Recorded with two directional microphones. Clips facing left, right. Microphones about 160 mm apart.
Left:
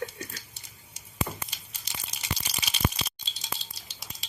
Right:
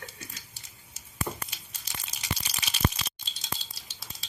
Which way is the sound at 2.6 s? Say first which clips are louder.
Right 1 dB; 10° left (ahead or behind).